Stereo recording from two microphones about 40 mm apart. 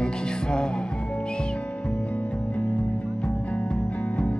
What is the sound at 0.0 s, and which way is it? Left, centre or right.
Music, left.